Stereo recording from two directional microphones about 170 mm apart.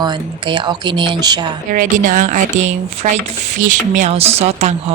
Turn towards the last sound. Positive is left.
turn(degrees=-40)  # may be behind; listen again after turning